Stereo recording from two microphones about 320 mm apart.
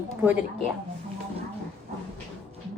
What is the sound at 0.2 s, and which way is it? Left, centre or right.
Speech, centre.